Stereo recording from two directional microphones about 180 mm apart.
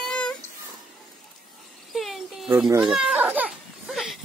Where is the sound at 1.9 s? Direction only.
Centre (ahead or behind).